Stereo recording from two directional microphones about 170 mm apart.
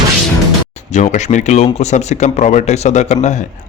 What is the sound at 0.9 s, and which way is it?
Speech, 45° left (ahead or behind).